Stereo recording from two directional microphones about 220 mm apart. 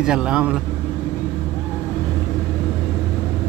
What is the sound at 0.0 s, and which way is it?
Speech, 5° right (ahead or behind).